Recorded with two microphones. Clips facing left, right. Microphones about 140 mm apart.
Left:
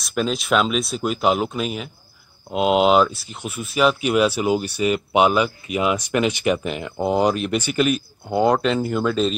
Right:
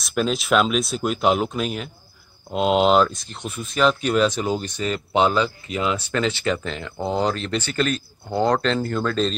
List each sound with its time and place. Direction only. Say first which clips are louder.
0.0 s speech: even; centre (ahead or behind)